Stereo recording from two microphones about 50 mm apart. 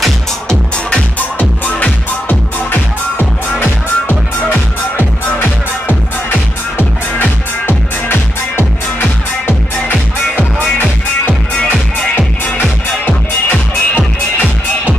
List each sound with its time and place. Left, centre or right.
1.4 s music: left
5.4 s music: left
13.0 s music: left